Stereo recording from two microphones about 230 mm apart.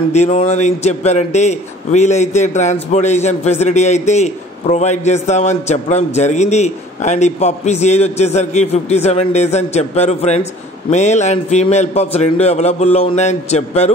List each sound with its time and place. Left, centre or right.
0.1 s a man's voice: left